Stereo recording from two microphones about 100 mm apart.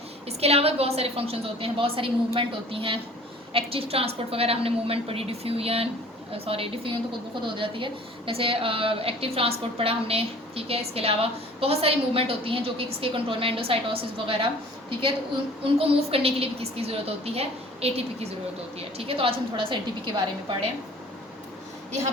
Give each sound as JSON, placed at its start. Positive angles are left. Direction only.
{"t": 0.3, "sound": "a woman's voice", "side_deg": -90}
{"t": 7.4, "sound": "a woman's voice", "side_deg": -60}
{"t": 15.6, "sound": "a woman's voice", "side_deg": -80}
{"t": 18.9, "sound": "a woman's voice", "side_deg": -70}